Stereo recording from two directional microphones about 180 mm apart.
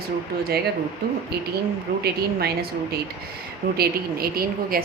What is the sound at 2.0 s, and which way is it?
A woman's voice, 60° right (ahead or behind).